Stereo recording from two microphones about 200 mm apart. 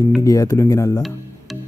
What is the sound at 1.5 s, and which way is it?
Music, centre (ahead or behind).